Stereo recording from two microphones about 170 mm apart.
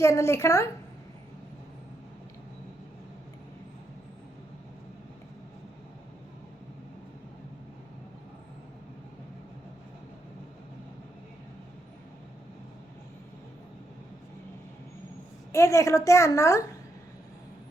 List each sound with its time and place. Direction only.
0.0 s a woman's voice: 15° left (ahead or behind)
15.5 s a woman's voice: 15° left (ahead or behind)